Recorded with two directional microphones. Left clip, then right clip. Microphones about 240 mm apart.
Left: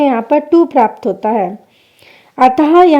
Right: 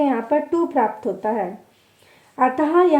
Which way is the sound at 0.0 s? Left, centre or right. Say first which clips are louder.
Left 8 dB; left.